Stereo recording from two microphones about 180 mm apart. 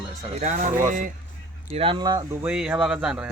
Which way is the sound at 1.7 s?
30° right (ahead or behind).